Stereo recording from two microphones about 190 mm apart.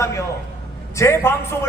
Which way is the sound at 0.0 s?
15° left (ahead or behind).